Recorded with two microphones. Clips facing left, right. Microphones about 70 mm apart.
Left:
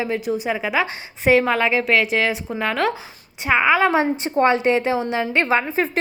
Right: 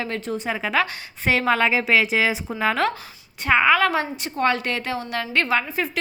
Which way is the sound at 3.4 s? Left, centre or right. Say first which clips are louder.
Left 1 dB; centre.